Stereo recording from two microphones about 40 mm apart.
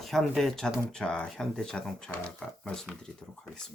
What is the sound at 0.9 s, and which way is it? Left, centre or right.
Speech, left.